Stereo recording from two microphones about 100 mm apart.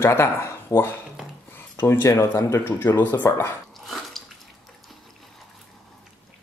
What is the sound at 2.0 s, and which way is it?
Speech, 35° left (ahead or behind).